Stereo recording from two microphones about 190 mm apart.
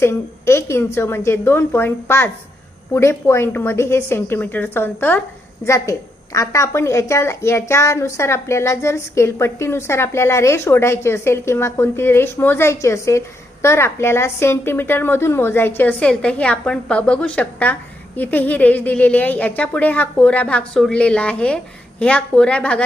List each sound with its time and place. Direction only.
0.0 s a woman's voice: 15° left (ahead or behind)